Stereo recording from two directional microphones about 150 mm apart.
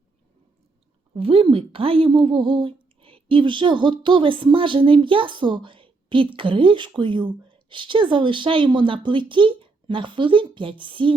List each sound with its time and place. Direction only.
1.1 s a woman's voice: 40° right (ahead or behind)